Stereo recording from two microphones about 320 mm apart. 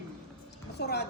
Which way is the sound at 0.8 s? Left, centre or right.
Left.